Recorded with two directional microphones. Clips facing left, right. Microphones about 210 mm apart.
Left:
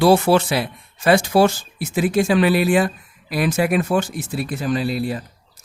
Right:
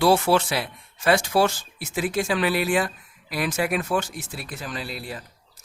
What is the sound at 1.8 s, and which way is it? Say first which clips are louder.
Speech: left 7 dB; 15° left (ahead or behind).